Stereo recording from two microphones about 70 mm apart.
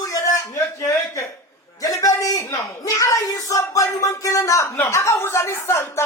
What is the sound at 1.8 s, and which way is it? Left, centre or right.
Speech, left.